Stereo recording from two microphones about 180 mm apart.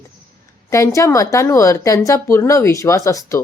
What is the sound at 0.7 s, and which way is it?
Speech, 15° left (ahead or behind).